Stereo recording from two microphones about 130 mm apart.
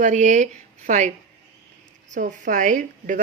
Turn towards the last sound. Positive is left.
turn(degrees=-90)